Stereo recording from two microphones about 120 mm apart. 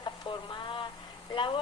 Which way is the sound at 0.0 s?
40° left (ahead or behind).